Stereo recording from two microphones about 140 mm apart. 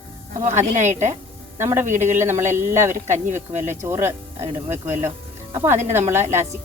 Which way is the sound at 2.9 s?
65° right (ahead or behind).